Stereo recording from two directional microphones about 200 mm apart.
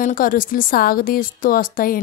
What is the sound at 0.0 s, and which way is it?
Speech, 45° left (ahead or behind).